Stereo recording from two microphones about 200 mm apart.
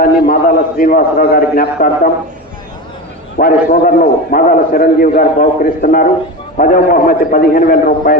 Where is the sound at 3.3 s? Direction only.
50° left (ahead or behind).